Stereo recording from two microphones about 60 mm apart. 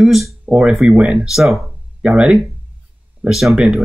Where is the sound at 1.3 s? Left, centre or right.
Centre.